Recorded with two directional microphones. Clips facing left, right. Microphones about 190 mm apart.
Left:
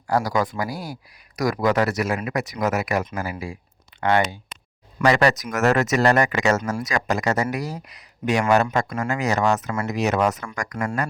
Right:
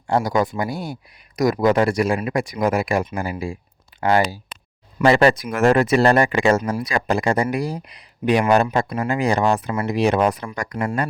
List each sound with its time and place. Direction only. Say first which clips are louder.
0.1 s speech: right 2 dB; 25° right (ahead or behind)
5.0 s speech: right 3 dB; 25° right (ahead or behind)
9.3 s speech: right 2 dB; 30° right (ahead or behind)